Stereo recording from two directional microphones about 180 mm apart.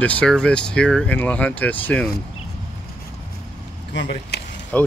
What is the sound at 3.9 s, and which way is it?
Speech, 75° left (ahead or behind).